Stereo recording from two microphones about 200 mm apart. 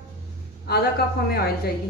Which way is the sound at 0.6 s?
50° left (ahead or behind).